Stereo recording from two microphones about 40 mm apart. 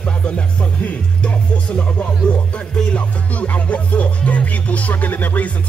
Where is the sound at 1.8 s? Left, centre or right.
Left.